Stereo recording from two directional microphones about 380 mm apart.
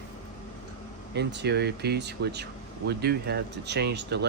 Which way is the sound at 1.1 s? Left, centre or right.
Right.